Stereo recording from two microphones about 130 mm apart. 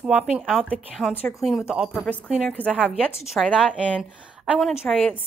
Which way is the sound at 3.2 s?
Centre (ahead or behind).